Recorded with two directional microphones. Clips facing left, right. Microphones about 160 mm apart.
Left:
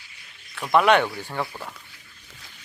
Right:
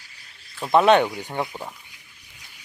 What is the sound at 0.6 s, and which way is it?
Speech, 25° right (ahead or behind).